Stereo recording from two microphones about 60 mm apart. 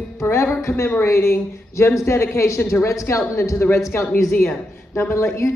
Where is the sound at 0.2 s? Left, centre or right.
Left.